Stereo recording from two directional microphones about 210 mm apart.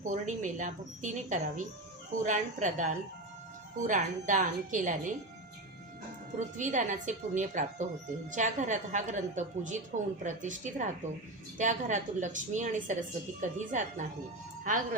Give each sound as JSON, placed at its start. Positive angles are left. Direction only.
{"t": 0.0, "sound": "a woman's voice", "side_deg": -35}
{"t": 6.4, "sound": "a woman's voice", "side_deg": -35}